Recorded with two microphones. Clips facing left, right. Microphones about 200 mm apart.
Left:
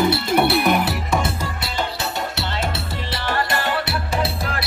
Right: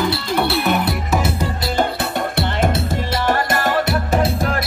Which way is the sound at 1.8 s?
50° right (ahead or behind).